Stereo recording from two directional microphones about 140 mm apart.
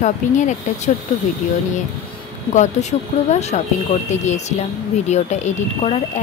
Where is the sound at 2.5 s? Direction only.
55° left (ahead or behind).